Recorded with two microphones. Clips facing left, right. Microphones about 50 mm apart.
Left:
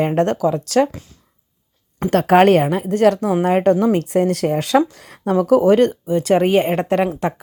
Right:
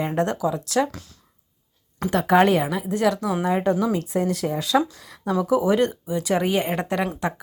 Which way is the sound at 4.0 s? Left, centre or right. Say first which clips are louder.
Left 6 dB; left.